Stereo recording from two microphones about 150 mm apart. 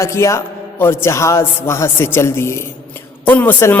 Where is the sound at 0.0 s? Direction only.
20° left (ahead or behind).